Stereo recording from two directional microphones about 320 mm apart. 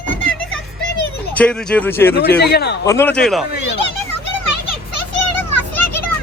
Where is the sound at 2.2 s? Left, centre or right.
Left.